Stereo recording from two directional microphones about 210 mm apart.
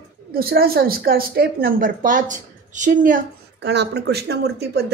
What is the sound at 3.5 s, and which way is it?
A woman's voice, 55° right (ahead or behind).